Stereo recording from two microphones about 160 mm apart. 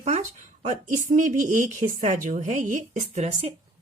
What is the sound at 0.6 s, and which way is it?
Speech, 55° right (ahead or behind).